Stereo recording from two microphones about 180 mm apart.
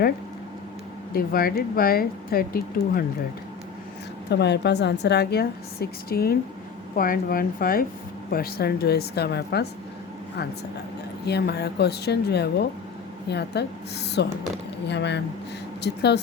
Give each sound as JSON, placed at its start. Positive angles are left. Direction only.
{"t": 1.1, "sound": "speech", "side_deg": 55}
{"t": 4.3, "sound": "a woman's voice", "side_deg": 70}
{"t": 11.3, "sound": "a woman's voice", "side_deg": 65}